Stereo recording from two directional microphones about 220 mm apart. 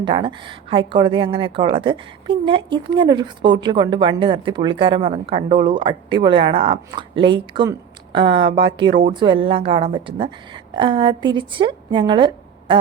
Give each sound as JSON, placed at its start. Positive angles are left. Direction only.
{"t": 0.0, "sound": "a woman's voice", "side_deg": -20}